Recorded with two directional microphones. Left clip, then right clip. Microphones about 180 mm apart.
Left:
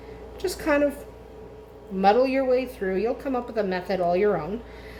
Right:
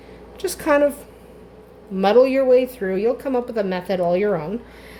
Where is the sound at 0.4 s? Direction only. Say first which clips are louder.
Right 5 dB; 50° right (ahead or behind).